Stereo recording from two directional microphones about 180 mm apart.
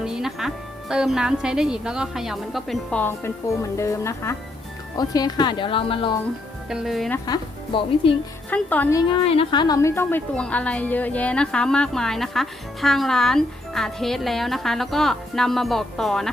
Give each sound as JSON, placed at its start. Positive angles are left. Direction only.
{"t": 0.0, "sound": "a woman's voice", "side_deg": -5}
{"t": 6.7, "sound": "a woman's voice", "side_deg": 0}
{"t": 7.3, "sound": "speech", "side_deg": 30}
{"t": 8.4, "sound": "a woman's voice", "side_deg": 10}
{"t": 9.2, "sound": "a woman's voice", "side_deg": 30}